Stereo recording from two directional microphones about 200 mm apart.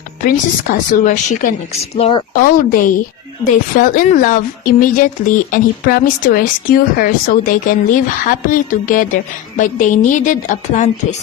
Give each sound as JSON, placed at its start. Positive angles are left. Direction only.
{"t": 0.3, "sound": "a woman's voice", "side_deg": 40}
{"t": 2.4, "sound": "a woman's voice", "side_deg": 45}